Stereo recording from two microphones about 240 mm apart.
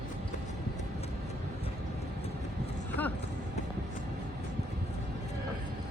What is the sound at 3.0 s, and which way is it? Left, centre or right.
Clip-clop, centre.